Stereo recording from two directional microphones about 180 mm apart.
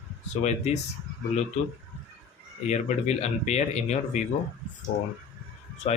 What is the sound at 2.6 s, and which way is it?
Speech, 40° left (ahead or behind).